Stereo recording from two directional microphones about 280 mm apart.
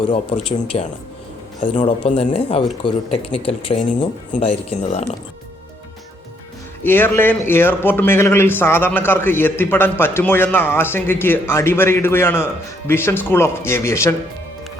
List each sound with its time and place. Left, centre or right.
0.1 s speech: centre
6.8 s a man's voice: centre